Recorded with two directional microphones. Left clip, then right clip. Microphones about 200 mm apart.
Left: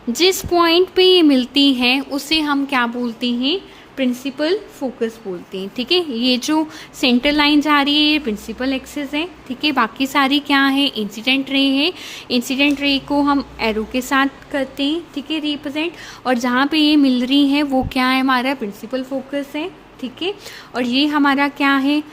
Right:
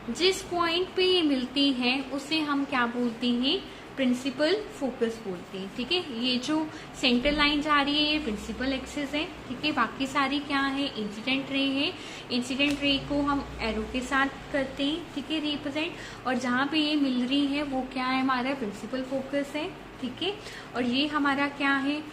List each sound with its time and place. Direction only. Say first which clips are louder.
0.1 s a woman's voice: left 11 dB; 55° left (ahead or behind); by 5.0 s 40° left (ahead or behind)
5.5 s a woman's voice: left 12 dB; 55° left (ahead or behind)
20.7 s a woman's voice: left 10 dB; 55° left (ahead or behind)